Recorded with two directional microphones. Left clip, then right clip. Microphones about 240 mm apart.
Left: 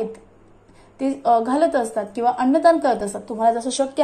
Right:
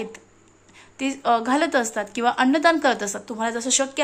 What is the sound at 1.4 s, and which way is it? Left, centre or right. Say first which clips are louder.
Speech: left 3 dB; right.